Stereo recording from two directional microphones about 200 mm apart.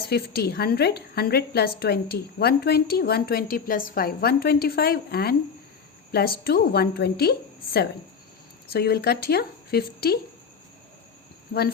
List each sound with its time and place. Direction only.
0.1 s a woman's voice: 50° left (ahead or behind)
11.5 s a woman's voice: 55° left (ahead or behind)